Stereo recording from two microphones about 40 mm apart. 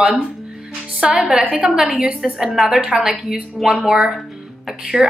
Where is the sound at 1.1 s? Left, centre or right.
Centre.